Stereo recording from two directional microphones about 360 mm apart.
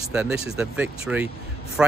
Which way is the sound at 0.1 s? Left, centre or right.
Centre.